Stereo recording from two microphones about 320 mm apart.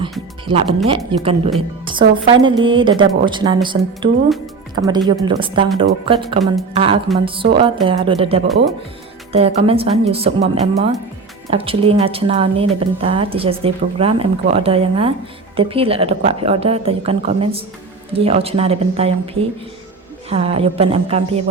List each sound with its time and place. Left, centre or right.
0.4 s a woman's voice: centre